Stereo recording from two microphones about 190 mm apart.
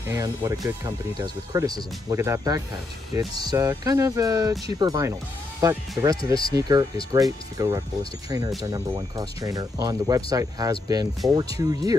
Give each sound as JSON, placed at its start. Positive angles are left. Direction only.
{"t": 0.1, "sound": "speech", "side_deg": -15}